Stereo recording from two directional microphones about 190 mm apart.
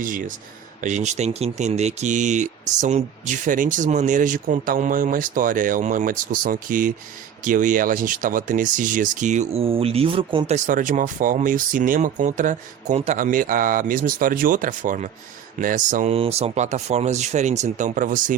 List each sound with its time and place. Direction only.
0.0 s speech: 45° right (ahead or behind)
16.1 s speech: 30° right (ahead or behind)